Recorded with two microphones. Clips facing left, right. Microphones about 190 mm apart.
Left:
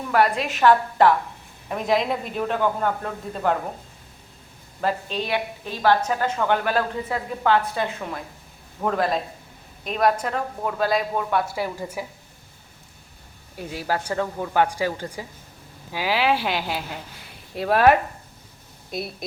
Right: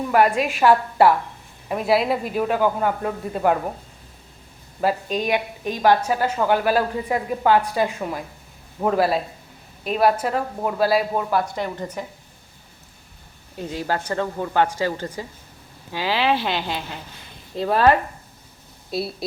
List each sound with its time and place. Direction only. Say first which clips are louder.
0.1 s a woman's voice: right 2 dB; 10° right (ahead or behind)
4.8 s a woman's voice: right 3 dB; 10° right (ahead or behind); by 12.0 s 10° left (ahead or behind)
13.6 s a woman's voice: right 1 dB; 10° left (ahead or behind)
18.9 s speech: right 4 dB; 30° right (ahead or behind)